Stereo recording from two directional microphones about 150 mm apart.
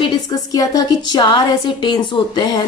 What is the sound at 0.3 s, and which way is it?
A woman's voice, 25° left (ahead or behind).